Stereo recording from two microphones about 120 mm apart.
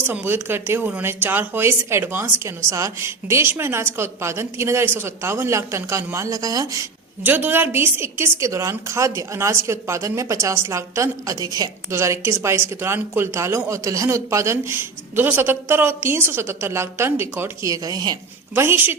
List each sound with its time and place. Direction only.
0.0 s a woman's voice: 15° right (ahead or behind)
7.3 s a woman's voice: 15° right (ahead or behind); by 18.2 s 35° right (ahead or behind)
18.5 s a woman's voice: 20° right (ahead or behind)